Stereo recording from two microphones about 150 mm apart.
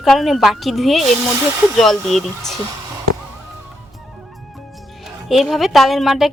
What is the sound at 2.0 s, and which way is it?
Speech, centre (ahead or behind).